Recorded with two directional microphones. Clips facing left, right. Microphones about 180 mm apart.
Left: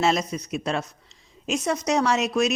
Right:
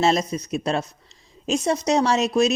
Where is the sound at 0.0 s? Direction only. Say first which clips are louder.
Right 3 dB; 35° right (ahead or behind).